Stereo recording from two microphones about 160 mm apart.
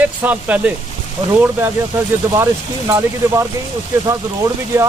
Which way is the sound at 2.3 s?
20° right (ahead or behind).